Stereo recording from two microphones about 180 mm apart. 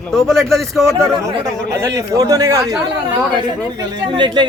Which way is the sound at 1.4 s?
20° right (ahead or behind).